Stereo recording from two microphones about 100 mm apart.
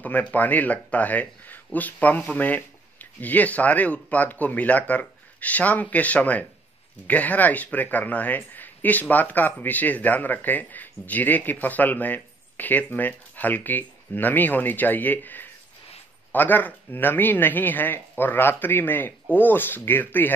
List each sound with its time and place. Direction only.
0.0 s speech: 15° left (ahead or behind)